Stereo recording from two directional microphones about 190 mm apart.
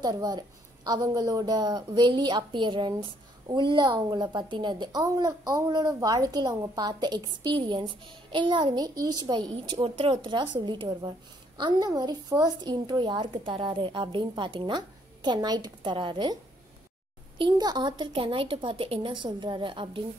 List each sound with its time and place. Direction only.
0.0 s a woman's voice: 20° right (ahead or behind)
17.4 s a woman's voice: 20° right (ahead or behind)